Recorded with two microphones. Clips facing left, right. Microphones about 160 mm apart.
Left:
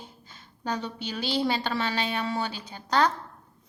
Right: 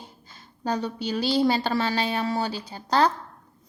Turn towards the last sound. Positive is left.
turn(degrees=-35)  # may be behind; listen again after turning